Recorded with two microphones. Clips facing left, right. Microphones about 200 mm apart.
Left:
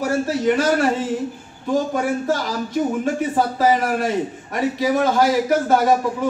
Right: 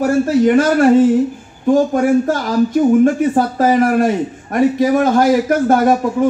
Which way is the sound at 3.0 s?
50° right (ahead or behind).